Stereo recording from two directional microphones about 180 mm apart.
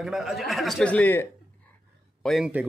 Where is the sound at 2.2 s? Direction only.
5° right (ahead or behind).